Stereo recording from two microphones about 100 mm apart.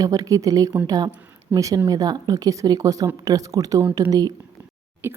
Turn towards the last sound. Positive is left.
turn(degrees=-20)  # may be behind; listen again after turning